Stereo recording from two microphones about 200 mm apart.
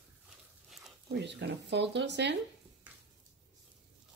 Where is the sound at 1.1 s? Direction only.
60° right (ahead or behind).